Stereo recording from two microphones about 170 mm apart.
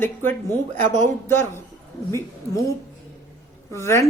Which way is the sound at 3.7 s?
15° left (ahead or behind).